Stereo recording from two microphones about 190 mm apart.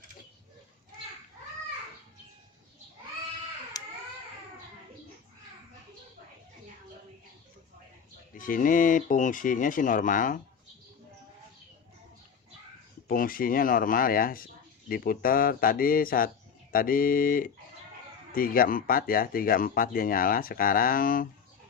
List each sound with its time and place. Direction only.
8.4 s speech: 45° left (ahead or behind)
13.1 s speech: 50° left (ahead or behind)